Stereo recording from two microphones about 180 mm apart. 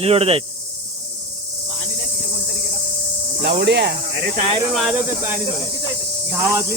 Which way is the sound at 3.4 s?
70° right (ahead or behind).